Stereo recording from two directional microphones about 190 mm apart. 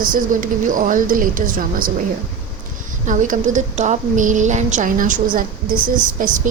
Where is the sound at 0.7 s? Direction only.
45° right (ahead or behind).